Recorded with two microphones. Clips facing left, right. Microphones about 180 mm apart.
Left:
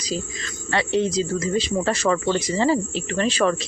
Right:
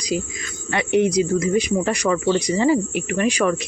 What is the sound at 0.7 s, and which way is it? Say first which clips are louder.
Speech: right 3 dB; 15° right (ahead or behind).